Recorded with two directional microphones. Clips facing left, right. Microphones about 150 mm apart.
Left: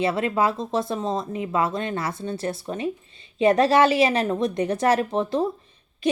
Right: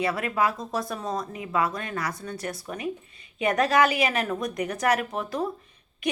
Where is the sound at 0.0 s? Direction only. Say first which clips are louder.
Left 3 dB; 25° left (ahead or behind).